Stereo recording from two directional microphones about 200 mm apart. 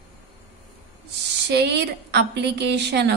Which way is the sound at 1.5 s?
55° right (ahead or behind).